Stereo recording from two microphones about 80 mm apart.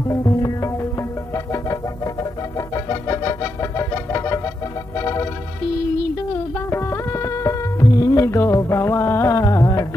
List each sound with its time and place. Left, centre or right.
0.1 s music: left
2.7 s organ: left
4.9 s music: left
6.7 s music: left